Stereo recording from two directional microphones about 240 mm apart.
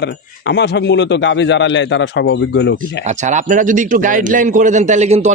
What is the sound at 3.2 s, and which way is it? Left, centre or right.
A man's voice, right.